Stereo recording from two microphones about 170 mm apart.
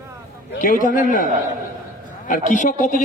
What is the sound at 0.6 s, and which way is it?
A man's voice, 55° left (ahead or behind).